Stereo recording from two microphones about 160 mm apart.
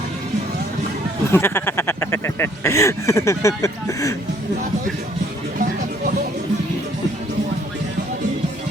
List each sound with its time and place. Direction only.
1.3 s speech: 15° left (ahead or behind)